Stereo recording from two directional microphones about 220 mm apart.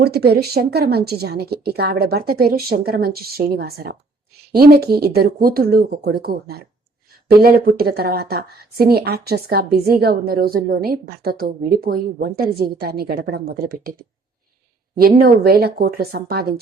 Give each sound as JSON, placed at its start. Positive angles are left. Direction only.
{"t": 0.0, "sound": "a woman's voice", "side_deg": -45}
{"t": 14.9, "sound": "a woman's voice", "side_deg": -45}